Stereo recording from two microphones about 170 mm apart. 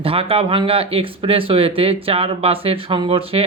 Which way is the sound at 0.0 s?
35° right (ahead or behind).